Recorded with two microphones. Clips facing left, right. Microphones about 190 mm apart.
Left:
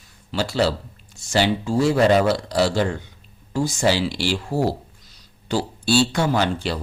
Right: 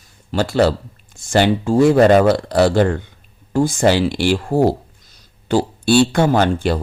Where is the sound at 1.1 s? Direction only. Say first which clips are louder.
Right 5 dB; 55° right (ahead or behind).